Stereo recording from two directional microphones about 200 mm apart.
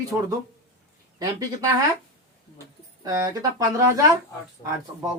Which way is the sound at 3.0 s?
15° right (ahead or behind).